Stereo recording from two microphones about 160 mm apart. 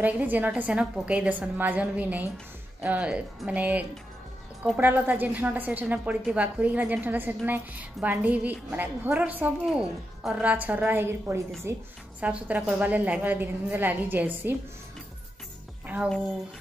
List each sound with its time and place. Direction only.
0.0 s a woman's voice: 10° right (ahead or behind)